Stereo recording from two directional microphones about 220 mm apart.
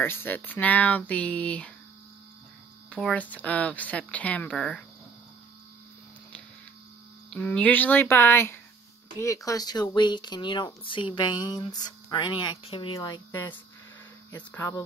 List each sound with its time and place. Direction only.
0.0 s speech: 10° left (ahead or behind)
2.9 s speech: 5° left (ahead or behind)
7.2 s speech: 5° left (ahead or behind)